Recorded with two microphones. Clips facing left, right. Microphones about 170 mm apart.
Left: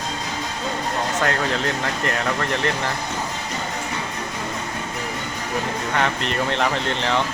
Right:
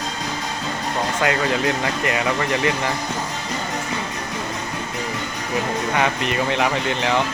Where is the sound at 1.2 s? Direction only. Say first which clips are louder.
Right 4 dB; 5° right (ahead or behind).